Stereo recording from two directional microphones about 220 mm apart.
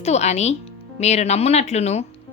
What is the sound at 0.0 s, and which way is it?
A woman's voice, 30° left (ahead or behind).